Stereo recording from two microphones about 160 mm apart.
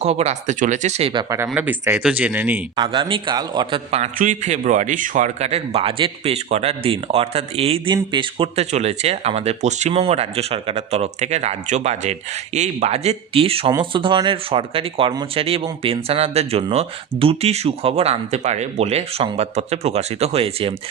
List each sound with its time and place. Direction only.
0.0 s speech: 40° right (ahead or behind)
1.1 s a man's voice: 20° right (ahead or behind)
1.5 s speech: 10° right (ahead or behind)
2.7 s a man's voice: 30° right (ahead or behind)
3.9 s speech: 50° right (ahead or behind)